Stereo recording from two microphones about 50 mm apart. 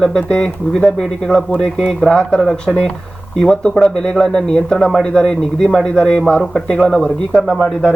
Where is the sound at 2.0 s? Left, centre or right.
Centre.